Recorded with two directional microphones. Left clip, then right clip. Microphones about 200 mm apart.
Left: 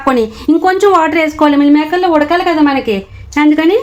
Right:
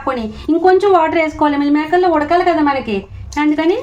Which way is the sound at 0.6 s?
55° left (ahead or behind).